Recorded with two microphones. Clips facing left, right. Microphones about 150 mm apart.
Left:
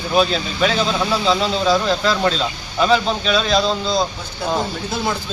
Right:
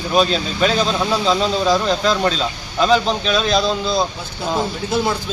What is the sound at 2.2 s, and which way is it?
Speech, centre (ahead or behind).